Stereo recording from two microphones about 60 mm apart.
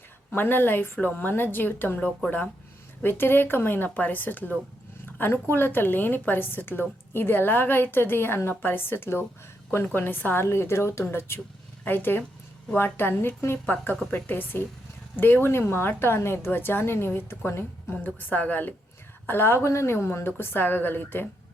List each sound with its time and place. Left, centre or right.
0.3 s a woman's voice: left
2.0 s speech: centre
3.0 s a woman's voice: left
3.8 s a woman's voice: left
10.4 s a woman's voice: left
17.9 s a woman's voice: left
19.3 s a woman's voice: left